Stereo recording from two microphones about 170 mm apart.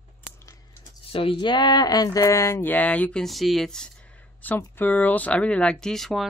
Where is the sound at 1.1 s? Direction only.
30° left (ahead or behind).